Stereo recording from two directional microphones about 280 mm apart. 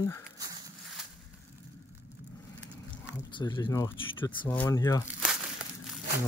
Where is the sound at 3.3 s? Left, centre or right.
Centre.